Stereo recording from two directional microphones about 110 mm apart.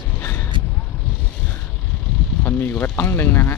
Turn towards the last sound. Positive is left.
turn(degrees=20)  # may be behind; listen again after turning